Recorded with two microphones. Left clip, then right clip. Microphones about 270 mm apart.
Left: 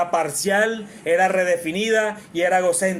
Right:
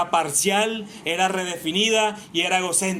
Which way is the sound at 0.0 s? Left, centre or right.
Right.